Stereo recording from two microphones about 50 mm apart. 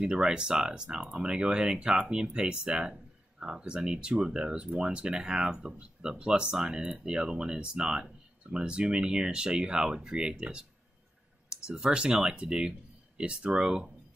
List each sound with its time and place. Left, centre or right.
0.0 s speech: centre